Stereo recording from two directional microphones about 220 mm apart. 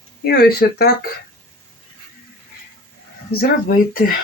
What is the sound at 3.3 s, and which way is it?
Speech, 45° left (ahead or behind).